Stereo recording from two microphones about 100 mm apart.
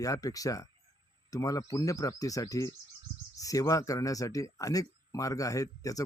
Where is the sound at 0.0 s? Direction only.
35° left (ahead or behind).